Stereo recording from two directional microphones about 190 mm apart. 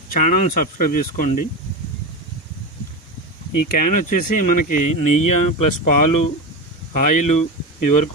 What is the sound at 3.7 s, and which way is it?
Speech, 45° left (ahead or behind).